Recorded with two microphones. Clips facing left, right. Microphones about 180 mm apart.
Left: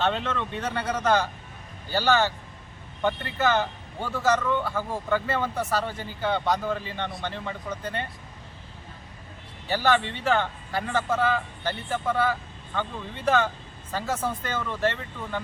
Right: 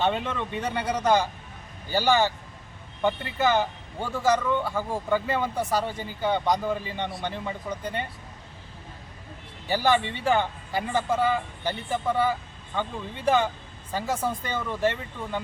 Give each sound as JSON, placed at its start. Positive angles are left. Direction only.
{"t": 0.0, "sound": "a man's voice", "side_deg": -10}
{"t": 9.6, "sound": "a man's voice", "side_deg": -10}